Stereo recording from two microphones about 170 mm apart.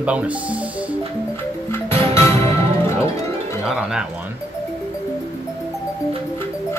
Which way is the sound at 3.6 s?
5° right (ahead or behind).